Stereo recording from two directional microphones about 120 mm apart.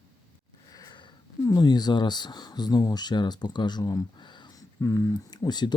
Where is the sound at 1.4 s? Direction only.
30° left (ahead or behind).